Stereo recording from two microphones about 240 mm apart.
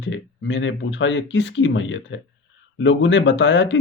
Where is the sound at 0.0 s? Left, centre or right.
Left.